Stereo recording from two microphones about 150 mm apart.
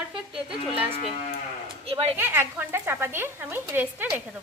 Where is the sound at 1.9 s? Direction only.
40° right (ahead or behind).